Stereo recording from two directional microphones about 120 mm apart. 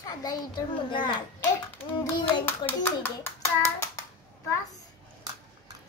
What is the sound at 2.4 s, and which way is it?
A child's voice, 15° left (ahead or behind).